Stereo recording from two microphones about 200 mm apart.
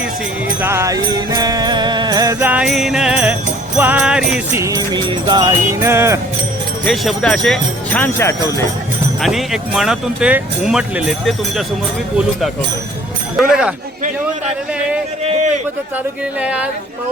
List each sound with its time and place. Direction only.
0.6 s music: 15° right (ahead or behind)
3.8 s jingle bell: 10° right (ahead or behind)
4.5 s music: 15° right (ahead or behind)
6.8 s speech: centre (ahead or behind); by 8.6 s 15° left (ahead or behind)
9.2 s speech: centre (ahead or behind)
13.3 s speech: 5° right (ahead or behind)
16.4 s speech: 5° right (ahead or behind)